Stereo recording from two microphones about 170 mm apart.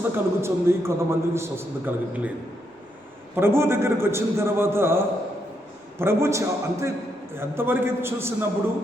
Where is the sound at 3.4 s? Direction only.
15° right (ahead or behind).